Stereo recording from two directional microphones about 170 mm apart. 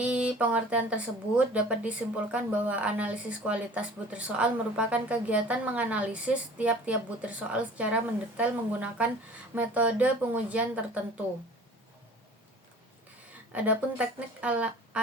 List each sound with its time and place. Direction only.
0.0 s speech: 5° right (ahead or behind)
13.5 s speech: 10° right (ahead or behind)